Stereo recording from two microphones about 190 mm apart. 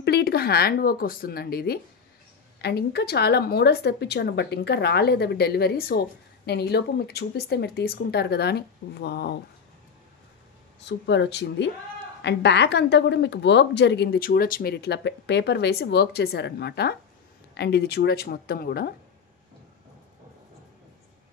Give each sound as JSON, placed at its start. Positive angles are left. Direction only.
{"t": 0.0, "sound": "a woman's voice", "side_deg": 55}
{"t": 10.8, "sound": "a woman's voice", "side_deg": 65}